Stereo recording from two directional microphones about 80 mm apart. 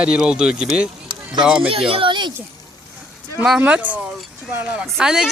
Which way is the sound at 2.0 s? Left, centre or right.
Right.